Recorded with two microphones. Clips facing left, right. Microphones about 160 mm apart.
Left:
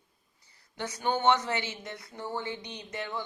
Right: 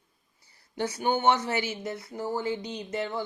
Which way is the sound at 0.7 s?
30° right (ahead or behind).